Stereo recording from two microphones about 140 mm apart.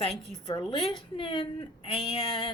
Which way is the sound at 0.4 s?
35° left (ahead or behind).